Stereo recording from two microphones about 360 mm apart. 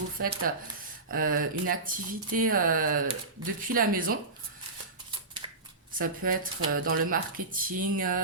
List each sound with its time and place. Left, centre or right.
0.2 s speech: right
6.0 s speech: right
6.6 s speech: right
6.9 s speech: right